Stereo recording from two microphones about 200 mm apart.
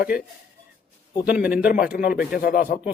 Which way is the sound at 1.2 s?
5° right (ahead or behind).